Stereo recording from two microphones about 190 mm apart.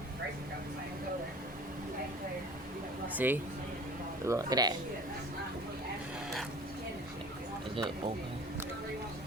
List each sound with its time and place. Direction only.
3.2 s speech: 10° right (ahead or behind)
7.8 s speech: 25° right (ahead or behind)